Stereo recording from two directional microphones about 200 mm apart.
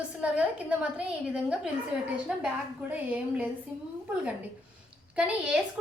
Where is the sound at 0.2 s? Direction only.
5° right (ahead or behind).